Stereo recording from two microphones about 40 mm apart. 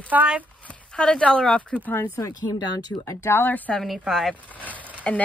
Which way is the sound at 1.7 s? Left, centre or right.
Centre.